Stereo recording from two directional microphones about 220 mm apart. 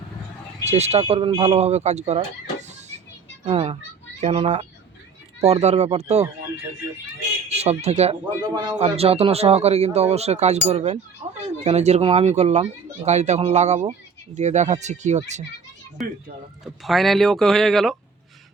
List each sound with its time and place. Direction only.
0.6 s speech: 30° right (ahead or behind)
7.5 s speech: 30° right (ahead or behind)
16.8 s speech: centre (ahead or behind)